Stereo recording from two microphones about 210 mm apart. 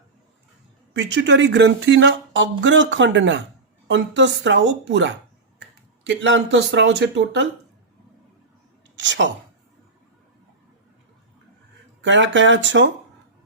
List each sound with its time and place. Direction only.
0.9 s speech: 60° right (ahead or behind)
9.0 s speech: 60° right (ahead or behind)
12.0 s speech: 60° right (ahead or behind)